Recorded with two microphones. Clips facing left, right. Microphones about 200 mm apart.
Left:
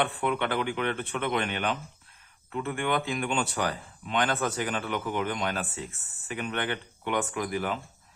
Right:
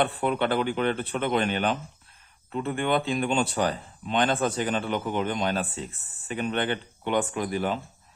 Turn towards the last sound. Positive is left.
turn(degrees=-30)  # may be behind; listen again after turning